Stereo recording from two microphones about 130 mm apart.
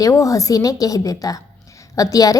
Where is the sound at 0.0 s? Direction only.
25° left (ahead or behind).